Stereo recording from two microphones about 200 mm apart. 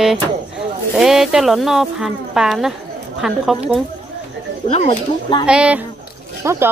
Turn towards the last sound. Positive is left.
turn(degrees=-15)  # may be behind; listen again after turning